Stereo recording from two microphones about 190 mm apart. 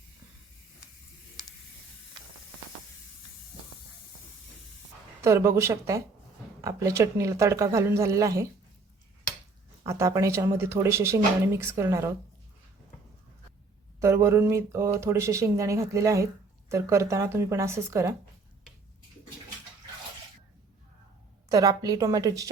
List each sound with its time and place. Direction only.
5.2 s speech: 15° right (ahead or behind)
9.8 s speech: 15° right (ahead or behind)
14.0 s speech: 15° right (ahead or behind)
21.5 s a woman's voice: 20° right (ahead or behind)